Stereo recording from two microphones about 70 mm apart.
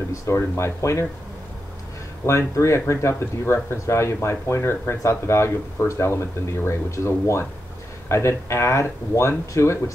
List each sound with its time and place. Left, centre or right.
0.1 s speech: left
2.2 s speech: left